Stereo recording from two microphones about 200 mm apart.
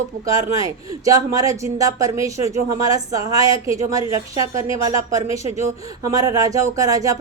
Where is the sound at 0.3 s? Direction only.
15° right (ahead or behind).